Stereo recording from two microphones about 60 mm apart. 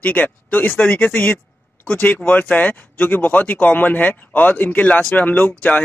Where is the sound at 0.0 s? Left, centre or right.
Left.